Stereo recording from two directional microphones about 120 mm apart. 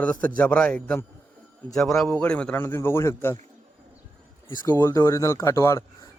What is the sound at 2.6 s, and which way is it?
Speech, 20° left (ahead or behind).